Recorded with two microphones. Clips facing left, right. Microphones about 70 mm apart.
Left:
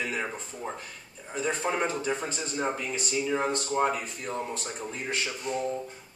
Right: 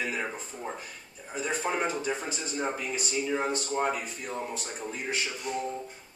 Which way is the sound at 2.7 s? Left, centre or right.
Centre.